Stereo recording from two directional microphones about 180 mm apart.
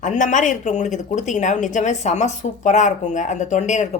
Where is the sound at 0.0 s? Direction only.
45° left (ahead or behind).